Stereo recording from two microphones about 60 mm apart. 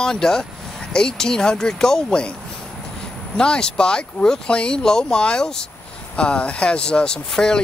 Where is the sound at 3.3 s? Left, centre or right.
Centre.